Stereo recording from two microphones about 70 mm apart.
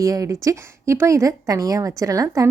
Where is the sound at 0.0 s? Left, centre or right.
Right.